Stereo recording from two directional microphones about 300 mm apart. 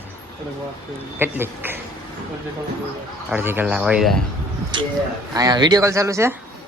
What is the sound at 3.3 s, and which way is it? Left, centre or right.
Speech, centre.